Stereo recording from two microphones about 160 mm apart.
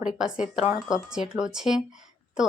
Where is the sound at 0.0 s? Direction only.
5° right (ahead or behind).